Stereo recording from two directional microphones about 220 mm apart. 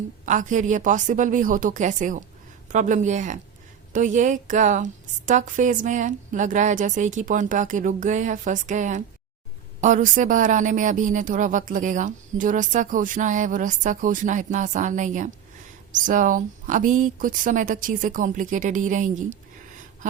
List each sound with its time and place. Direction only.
0.3 s speech: 35° right (ahead or behind)